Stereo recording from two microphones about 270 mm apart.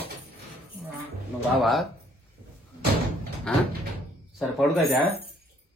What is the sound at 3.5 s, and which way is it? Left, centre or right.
A man's voice, centre.